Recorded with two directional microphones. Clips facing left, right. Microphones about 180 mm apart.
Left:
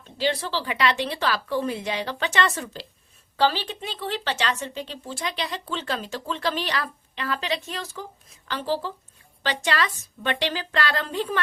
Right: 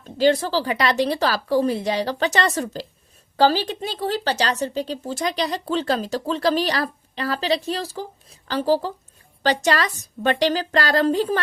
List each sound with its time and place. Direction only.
0.0 s speech: 45° right (ahead or behind)